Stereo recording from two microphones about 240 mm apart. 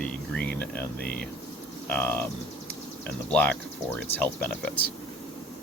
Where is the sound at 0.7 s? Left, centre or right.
Left.